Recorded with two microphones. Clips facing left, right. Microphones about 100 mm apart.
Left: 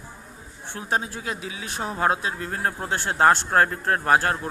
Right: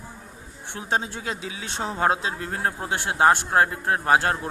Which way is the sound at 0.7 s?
25° right (ahead or behind).